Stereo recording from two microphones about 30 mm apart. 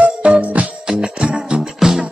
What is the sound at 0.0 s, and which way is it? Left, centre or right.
Music, right.